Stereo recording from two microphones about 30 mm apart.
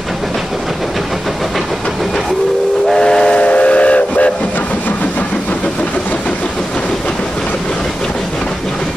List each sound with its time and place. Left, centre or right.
2.9 s steam whistle: left
3.3 s train: left